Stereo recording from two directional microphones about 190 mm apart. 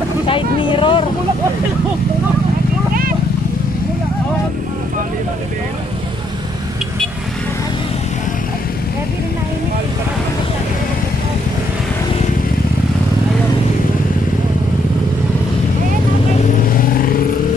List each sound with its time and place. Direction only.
0.3 s vehicle: 25° left (ahead or behind)
16.7 s vehicle: 50° left (ahead or behind)